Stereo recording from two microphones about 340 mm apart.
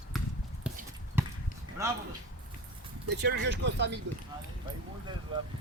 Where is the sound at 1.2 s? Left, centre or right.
Centre.